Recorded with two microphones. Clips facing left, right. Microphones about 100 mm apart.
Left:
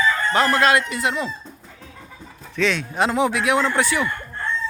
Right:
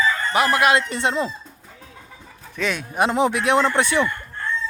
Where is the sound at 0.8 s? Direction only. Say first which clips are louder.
Right 1 dB; 30° right (ahead or behind).